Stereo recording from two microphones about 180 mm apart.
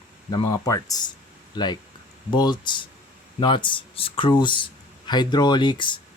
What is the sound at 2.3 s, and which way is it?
Speech, 25° left (ahead or behind).